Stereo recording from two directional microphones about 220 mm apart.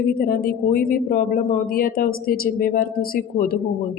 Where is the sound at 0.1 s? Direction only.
40° left (ahead or behind).